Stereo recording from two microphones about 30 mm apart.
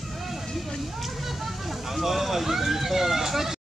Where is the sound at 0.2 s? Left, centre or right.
Centre.